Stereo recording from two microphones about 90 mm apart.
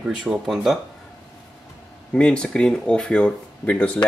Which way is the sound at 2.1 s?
10° left (ahead or behind).